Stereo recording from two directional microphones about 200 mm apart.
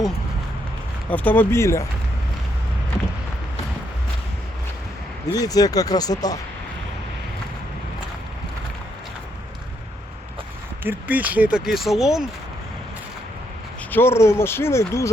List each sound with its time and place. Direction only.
1.1 s speech: 10° left (ahead or behind)
5.3 s speech: 20° left (ahead or behind)
10.8 s speech: 10° right (ahead or behind)
13.9 s speech: 10° left (ahead or behind)